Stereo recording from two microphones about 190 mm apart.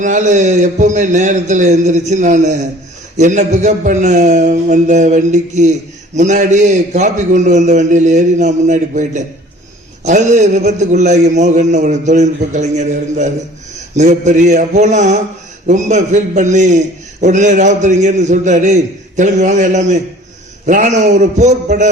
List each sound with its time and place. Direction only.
0.0 s a man's voice: 40° right (ahead or behind)